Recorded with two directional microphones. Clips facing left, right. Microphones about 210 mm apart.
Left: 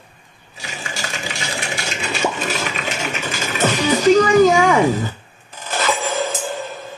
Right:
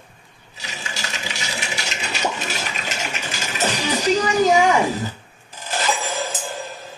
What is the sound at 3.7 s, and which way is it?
Music, 50° left (ahead or behind).